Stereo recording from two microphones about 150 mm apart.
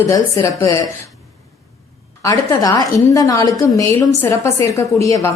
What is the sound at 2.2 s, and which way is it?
A woman's voice, 25° left (ahead or behind).